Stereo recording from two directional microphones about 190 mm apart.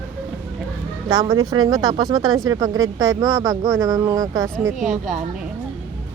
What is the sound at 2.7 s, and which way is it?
Speech, 90° right.